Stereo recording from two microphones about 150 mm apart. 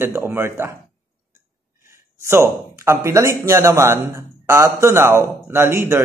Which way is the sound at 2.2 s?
15° right (ahead or behind).